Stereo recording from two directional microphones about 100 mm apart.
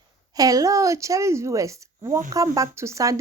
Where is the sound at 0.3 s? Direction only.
35° right (ahead or behind).